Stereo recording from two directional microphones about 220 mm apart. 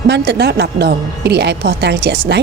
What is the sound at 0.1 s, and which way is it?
Speech, 50° right (ahead or behind).